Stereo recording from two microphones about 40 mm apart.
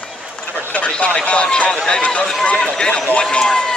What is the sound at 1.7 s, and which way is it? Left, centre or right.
Speech, centre.